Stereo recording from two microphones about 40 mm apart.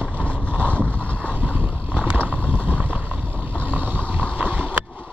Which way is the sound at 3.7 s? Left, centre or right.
Right.